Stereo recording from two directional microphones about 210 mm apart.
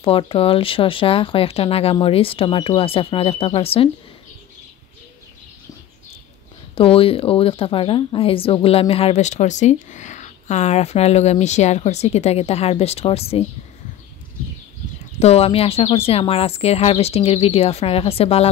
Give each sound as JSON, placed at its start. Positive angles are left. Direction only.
{"t": 0.0, "sound": "speech", "side_deg": 25}
{"t": 6.7, "sound": "speech", "side_deg": 25}
{"t": 15.1, "sound": "speech", "side_deg": 30}